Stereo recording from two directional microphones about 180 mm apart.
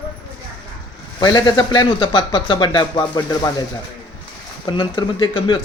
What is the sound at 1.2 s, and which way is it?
Speech, 25° left (ahead or behind).